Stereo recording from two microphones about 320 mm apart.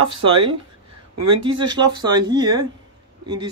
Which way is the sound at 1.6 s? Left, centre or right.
Centre.